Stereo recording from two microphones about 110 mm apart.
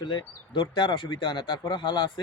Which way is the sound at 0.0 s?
45° left (ahead or behind).